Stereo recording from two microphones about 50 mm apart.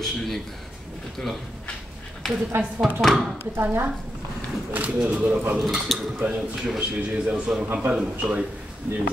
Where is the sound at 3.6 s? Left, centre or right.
Right.